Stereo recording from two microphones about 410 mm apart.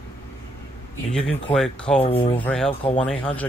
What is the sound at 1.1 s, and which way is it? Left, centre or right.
Speech, centre.